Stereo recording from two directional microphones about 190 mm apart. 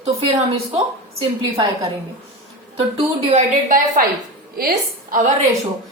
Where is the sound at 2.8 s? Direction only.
30° right (ahead or behind); by 5.2 s 50° right (ahead or behind).